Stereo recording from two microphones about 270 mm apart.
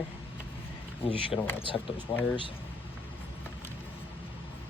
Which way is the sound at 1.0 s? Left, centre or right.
Centre.